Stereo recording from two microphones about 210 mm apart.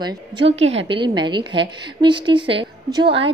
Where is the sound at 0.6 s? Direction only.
65° right (ahead or behind).